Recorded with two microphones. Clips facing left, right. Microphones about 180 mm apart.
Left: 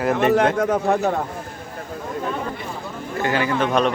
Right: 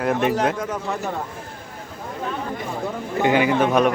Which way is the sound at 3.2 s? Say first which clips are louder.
Right 3 dB; 15° right (ahead or behind).